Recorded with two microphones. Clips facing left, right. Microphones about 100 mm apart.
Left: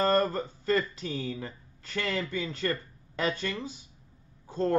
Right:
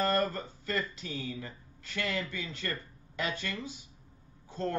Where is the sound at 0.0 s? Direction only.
40° left (ahead or behind).